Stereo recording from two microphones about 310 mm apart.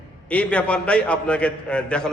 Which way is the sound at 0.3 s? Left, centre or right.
Centre.